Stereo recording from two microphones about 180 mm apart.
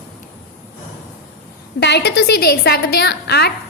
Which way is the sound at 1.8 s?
70° left (ahead or behind).